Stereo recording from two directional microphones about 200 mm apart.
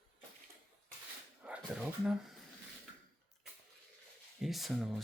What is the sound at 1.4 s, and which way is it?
Speech, 5° right (ahead or behind).